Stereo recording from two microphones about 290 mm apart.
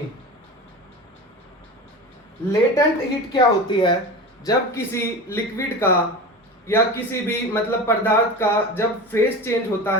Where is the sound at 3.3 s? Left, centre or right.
Centre.